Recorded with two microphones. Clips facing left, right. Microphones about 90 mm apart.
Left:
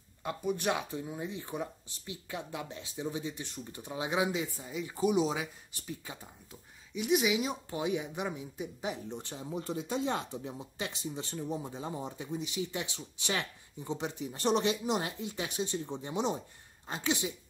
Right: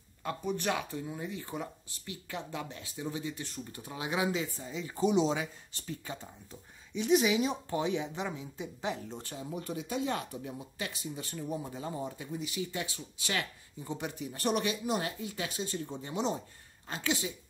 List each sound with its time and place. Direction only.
0.2 s speech: 15° left (ahead or behind)
7.8 s speech: 15° left (ahead or behind)